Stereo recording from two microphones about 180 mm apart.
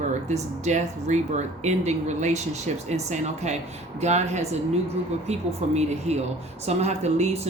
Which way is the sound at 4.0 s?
40° right (ahead or behind).